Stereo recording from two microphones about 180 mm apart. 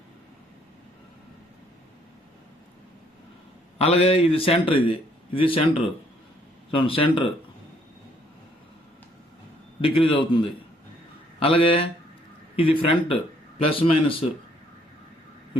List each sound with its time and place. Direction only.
3.8 s a man's voice: 35° left (ahead or behind)
6.7 s speech: 30° left (ahead or behind)
9.8 s a man's voice: 30° left (ahead or behind)